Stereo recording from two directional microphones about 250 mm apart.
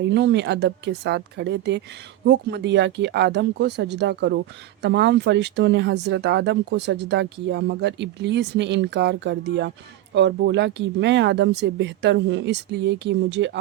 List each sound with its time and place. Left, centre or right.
0.0 s speech: right